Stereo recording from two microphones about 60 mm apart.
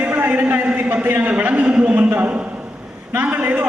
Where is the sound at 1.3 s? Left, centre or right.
Right.